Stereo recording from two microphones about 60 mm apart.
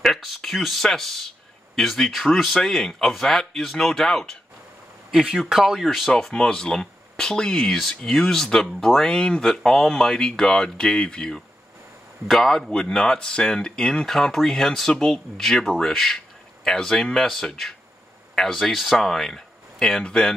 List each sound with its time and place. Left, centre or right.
0.0 s speech: centre
5.1 s speech: centre